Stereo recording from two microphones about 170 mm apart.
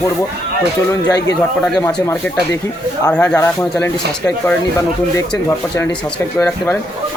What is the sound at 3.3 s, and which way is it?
Speech, 10° left (ahead or behind).